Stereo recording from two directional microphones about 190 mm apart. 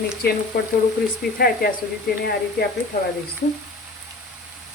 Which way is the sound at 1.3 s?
50° left (ahead or behind).